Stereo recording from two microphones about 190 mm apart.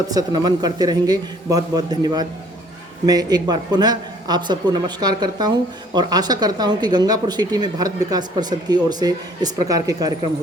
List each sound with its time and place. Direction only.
0.1 s speech: 20° right (ahead or behind)